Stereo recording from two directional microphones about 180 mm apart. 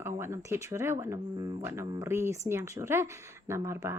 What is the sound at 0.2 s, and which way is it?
Speech, 15° right (ahead or behind).